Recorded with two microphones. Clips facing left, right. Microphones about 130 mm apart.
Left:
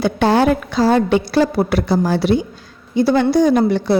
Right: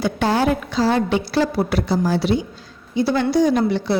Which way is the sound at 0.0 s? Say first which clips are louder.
Left 4 dB; 60° left (ahead or behind).